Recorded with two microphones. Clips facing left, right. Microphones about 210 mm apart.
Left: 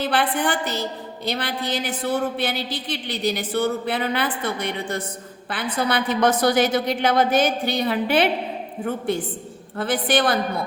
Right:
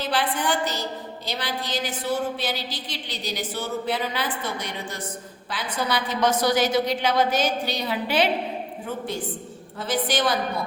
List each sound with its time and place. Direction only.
0.0 s a woman's voice: 60° left (ahead or behind)